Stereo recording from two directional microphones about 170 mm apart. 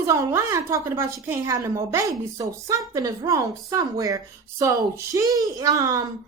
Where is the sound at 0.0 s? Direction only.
15° right (ahead or behind).